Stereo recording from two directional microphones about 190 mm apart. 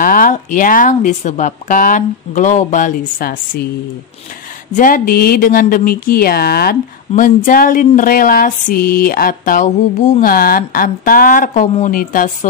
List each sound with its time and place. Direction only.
0.0 s speech: 45° left (ahead or behind)
4.7 s speech: 45° left (ahead or behind)